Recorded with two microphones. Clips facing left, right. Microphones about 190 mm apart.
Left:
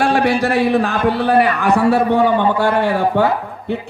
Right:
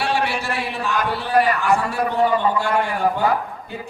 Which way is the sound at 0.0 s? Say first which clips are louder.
Left 7 dB; 55° left (ahead or behind).